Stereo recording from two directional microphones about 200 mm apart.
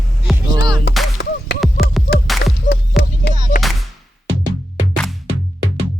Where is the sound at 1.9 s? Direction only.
Centre (ahead or behind).